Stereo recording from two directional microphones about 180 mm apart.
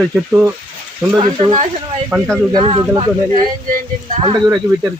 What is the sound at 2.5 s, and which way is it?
Speech, 25° right (ahead or behind).